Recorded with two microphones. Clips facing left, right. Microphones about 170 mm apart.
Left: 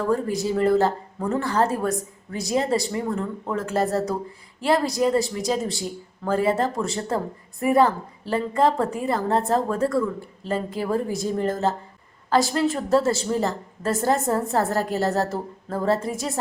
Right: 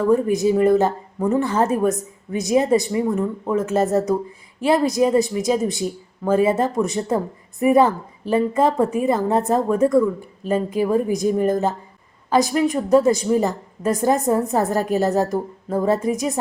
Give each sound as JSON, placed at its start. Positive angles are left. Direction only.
{"t": 0.0, "sound": "a woman's voice", "side_deg": -20}